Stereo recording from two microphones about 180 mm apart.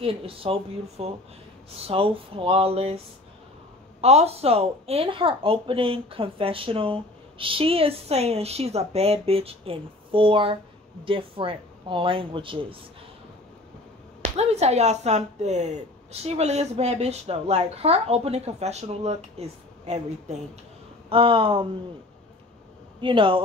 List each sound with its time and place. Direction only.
0.0 s speech: 30° right (ahead or behind)
4.0 s speech: 35° right (ahead or behind)
14.2 s speech: 35° right (ahead or behind)
22.9 s speech: 30° right (ahead or behind)